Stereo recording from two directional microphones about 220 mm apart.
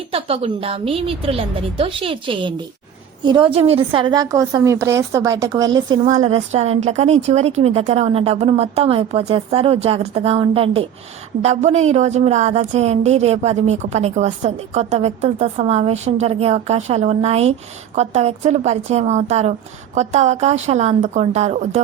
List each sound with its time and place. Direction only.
0.1 s a woman's voice: 25° right (ahead or behind)
6.1 s a woman's voice: 30° right (ahead or behind)